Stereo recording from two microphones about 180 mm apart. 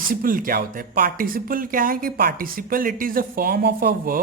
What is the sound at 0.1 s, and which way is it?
Speech, 50° right (ahead or behind).